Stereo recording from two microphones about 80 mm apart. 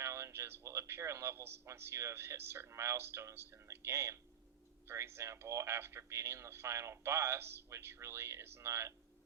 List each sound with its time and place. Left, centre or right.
0.0 s a man's voice: right